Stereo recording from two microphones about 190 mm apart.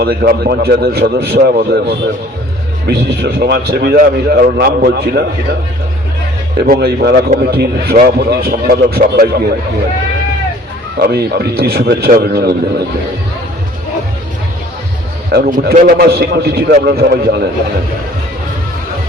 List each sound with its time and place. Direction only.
0.0 s a man's voice: 55° right (ahead or behind)
6.7 s a man's voice: 55° right (ahead or behind)
11.0 s a man's voice: 55° right (ahead or behind)
15.3 s a man's voice: 50° right (ahead or behind)